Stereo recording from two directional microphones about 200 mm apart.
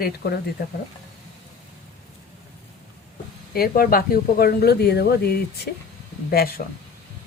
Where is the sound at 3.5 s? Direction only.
50° left (ahead or behind).